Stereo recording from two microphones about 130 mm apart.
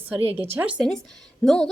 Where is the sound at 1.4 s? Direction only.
5° left (ahead or behind).